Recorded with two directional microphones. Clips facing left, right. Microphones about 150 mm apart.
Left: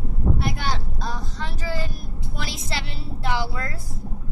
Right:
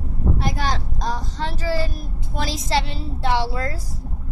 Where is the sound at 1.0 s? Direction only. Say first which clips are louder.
Right 5 dB; 35° right (ahead or behind).